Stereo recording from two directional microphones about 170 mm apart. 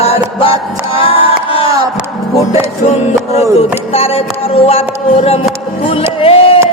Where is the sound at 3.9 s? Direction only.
35° left (ahead or behind).